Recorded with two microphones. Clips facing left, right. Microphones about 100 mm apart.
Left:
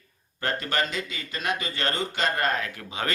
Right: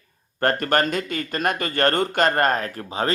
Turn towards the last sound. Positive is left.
turn(degrees=-40)  # may be behind; listen again after turning